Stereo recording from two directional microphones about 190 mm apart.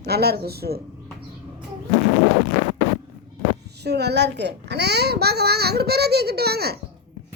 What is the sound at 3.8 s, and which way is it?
A child's voice, 60° right (ahead or behind).